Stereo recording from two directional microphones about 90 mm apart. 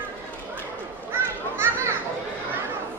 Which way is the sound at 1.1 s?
30° right (ahead or behind).